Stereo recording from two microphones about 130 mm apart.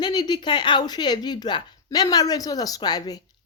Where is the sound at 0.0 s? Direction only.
35° left (ahead or behind).